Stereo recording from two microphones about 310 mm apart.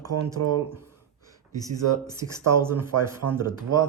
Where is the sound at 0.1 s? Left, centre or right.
Right.